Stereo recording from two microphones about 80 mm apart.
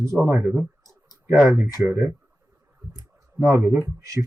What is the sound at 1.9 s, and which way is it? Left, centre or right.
Speech, right.